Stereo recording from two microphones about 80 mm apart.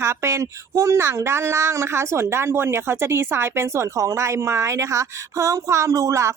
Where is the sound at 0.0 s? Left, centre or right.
Right.